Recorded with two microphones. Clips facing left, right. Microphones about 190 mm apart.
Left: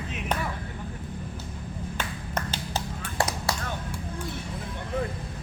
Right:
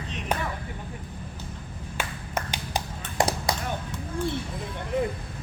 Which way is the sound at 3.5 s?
15° right (ahead or behind).